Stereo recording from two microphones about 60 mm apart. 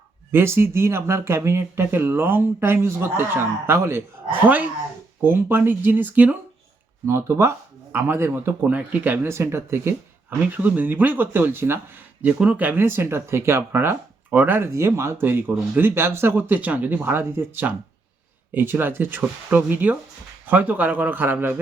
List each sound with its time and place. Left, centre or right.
0.3 s speech: right
4.4 s a man's voice: right
7.1 s speech: right
7.9 s speech: right
8.6 s a man's voice: right
9.2 s speech: right
10.2 s speech: right
12.2 s speech: right
14.3 s speech: right
14.7 s a man's voice: right